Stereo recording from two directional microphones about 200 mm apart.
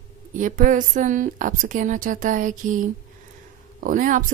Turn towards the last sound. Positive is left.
turn(degrees=-40)  # may be behind; listen again after turning